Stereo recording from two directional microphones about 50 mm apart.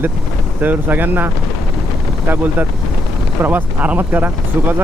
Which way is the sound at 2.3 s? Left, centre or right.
Right.